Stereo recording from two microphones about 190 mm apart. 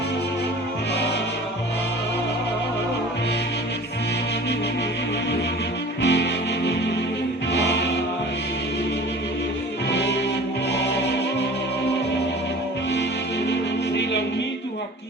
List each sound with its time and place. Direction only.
6.0 s music: 65° left (ahead or behind)
7.5 s music: 60° left (ahead or behind)
9.9 s music: 65° left (ahead or behind)